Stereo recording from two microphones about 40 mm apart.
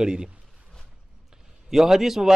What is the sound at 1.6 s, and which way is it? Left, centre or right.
Speech, centre.